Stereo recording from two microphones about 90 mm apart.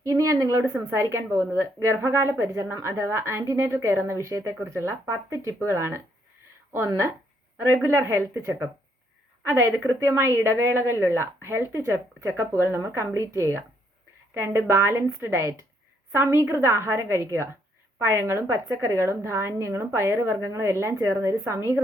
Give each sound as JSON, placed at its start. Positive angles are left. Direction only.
{"t": 0.0, "sound": "a woman's voice", "side_deg": -35}